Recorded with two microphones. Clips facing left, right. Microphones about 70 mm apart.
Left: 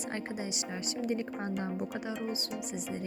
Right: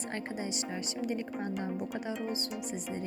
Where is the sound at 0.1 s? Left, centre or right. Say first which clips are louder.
Even; centre.